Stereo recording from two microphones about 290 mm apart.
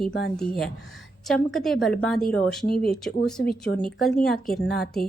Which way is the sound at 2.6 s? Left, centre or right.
Left.